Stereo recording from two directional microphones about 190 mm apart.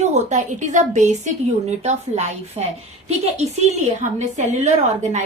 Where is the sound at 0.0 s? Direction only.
35° right (ahead or behind).